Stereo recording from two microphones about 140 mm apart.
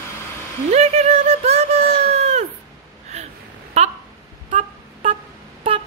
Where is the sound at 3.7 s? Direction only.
50° right (ahead or behind).